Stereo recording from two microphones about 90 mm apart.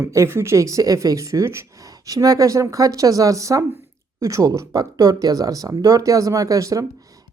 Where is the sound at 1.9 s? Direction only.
45° right (ahead or behind).